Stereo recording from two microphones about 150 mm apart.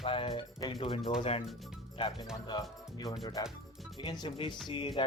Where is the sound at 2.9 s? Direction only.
25° left (ahead or behind).